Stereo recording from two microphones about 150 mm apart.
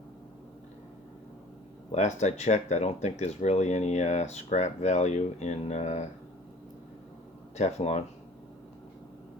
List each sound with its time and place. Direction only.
1.9 s speech: 50° left (ahead or behind)
7.5 s speech: 50° left (ahead or behind)